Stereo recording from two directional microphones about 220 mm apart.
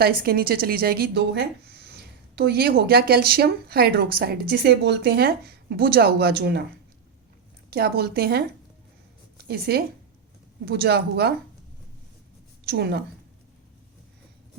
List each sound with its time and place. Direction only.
0.0 s a woman's voice: 45° right (ahead or behind)
7.7 s a woman's voice: 45° right (ahead or behind)
12.6 s a woman's voice: 45° right (ahead or behind)